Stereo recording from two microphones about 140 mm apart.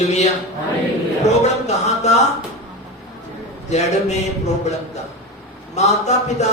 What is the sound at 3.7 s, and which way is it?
Speech, 55° left (ahead or behind).